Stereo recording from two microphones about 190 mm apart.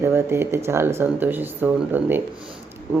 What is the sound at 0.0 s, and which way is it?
Speech, 15° right (ahead or behind).